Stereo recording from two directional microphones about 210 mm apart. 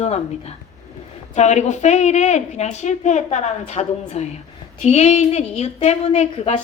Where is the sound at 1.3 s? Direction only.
35° left (ahead or behind).